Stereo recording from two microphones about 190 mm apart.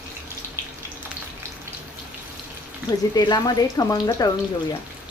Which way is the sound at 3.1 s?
20° left (ahead or behind).